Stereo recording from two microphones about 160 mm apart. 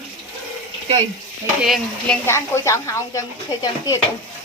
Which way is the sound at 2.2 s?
15° left (ahead or behind).